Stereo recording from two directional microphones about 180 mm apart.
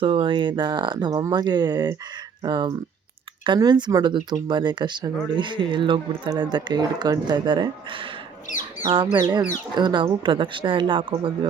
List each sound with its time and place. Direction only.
0.0 s speech: 30° right (ahead or behind)
9.1 s speech: 25° right (ahead or behind)